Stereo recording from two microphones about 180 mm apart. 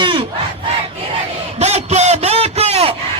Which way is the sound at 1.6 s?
35° right (ahead or behind).